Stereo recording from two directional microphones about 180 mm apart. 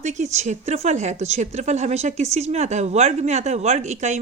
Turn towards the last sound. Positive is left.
turn(degrees=-40)  # may be behind; listen again after turning